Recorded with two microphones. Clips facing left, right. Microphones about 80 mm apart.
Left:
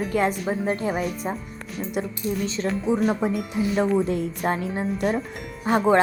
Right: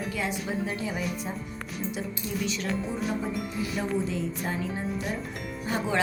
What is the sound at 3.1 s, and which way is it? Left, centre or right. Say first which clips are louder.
Speech: left 6 dB; left.